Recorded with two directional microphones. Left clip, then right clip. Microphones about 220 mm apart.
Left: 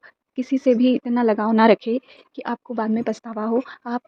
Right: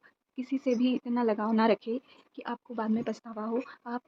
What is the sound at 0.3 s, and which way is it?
Speech, 30° left (ahead or behind).